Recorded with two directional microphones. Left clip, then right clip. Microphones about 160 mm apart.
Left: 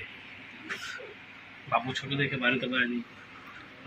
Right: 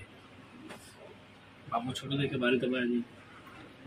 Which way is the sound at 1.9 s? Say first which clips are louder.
Left 4 dB; 20° right (ahead or behind).